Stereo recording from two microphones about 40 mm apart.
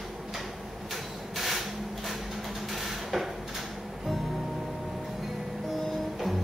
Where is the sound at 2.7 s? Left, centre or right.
Centre.